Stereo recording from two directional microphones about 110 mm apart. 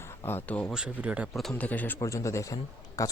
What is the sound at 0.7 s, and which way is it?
Speech, 10° right (ahead or behind).